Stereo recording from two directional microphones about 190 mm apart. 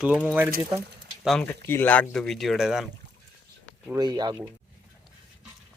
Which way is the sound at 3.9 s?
20° right (ahead or behind).